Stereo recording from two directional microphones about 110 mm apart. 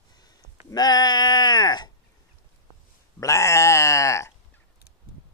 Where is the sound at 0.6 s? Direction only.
40° left (ahead or behind).